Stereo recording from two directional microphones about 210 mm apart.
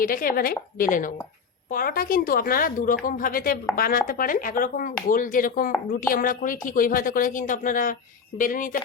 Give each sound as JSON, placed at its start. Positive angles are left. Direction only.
{"t": 0.0, "sound": "a woman's voice", "side_deg": 40}